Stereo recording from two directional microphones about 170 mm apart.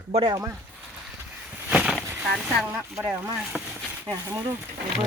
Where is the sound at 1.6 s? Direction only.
5° right (ahead or behind).